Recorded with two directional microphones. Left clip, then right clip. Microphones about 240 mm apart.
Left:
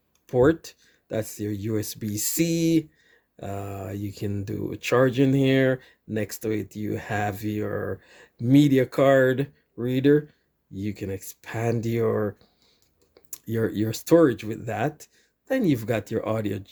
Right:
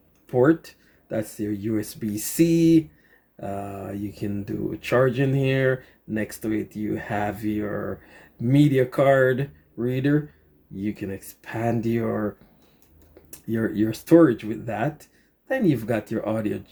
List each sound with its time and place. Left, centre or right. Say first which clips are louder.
0.3 s speech: right 1 dB; left
13.3 s speech: even; left